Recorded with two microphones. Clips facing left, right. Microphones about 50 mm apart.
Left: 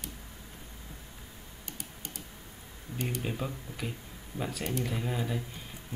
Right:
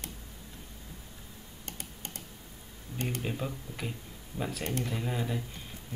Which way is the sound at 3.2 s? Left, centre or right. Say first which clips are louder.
Even; centre.